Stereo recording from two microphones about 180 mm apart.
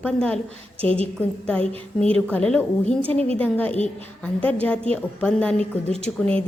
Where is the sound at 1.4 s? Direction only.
5° left (ahead or behind).